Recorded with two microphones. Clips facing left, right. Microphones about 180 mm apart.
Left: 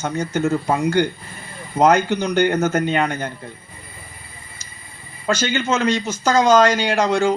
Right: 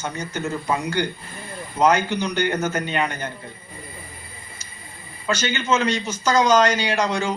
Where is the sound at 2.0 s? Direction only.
50° left (ahead or behind).